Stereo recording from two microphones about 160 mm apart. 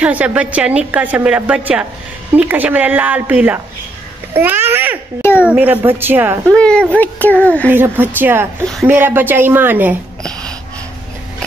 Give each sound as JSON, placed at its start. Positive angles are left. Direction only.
{"t": 0.0, "sound": "a woman's voice", "side_deg": -10}
{"t": 6.5, "sound": "a child's voice", "side_deg": 5}
{"t": 7.7, "sound": "a woman's voice", "side_deg": -10}